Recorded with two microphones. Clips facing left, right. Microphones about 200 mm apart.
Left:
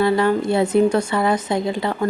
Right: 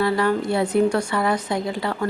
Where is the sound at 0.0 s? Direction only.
25° left (ahead or behind).